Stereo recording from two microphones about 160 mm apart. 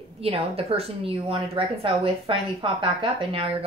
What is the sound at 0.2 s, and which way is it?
A woman's voice, 40° right (ahead or behind).